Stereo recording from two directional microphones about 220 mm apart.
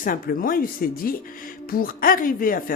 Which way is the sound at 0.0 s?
40° left (ahead or behind).